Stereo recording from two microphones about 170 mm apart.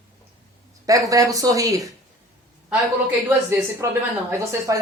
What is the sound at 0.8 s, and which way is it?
Speech, 20° right (ahead or behind).